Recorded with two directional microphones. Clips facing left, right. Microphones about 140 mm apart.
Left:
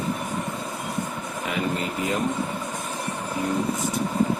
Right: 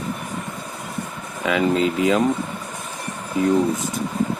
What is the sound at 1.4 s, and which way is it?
Speech, 90° right.